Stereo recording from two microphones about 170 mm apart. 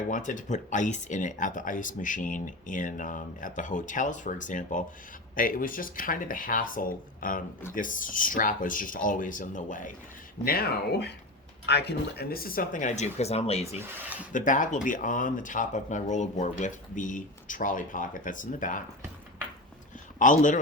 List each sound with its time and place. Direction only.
0.1 s speech: 50° left (ahead or behind)
10.4 s speech: 65° left (ahead or behind)
11.6 s speech: 80° left; by 13.7 s 40° left (ahead or behind)
14.3 s speech: 50° left (ahead or behind)
20.1 s speech: 50° left (ahead or behind)